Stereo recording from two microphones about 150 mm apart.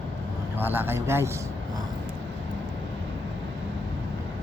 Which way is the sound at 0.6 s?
15° right (ahead or behind).